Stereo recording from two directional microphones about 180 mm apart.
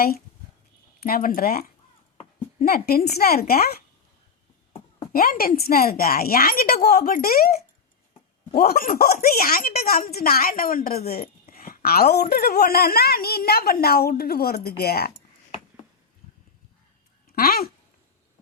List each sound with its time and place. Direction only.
0.9 s speech: 55° left (ahead or behind)
5.1 s speech: 55° left (ahead or behind)
17.2 s speech: 55° left (ahead or behind)